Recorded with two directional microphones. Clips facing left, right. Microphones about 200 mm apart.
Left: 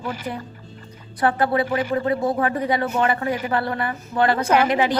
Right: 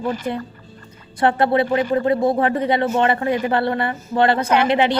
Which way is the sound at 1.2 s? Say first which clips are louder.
Right 3 dB; 25° right (ahead or behind).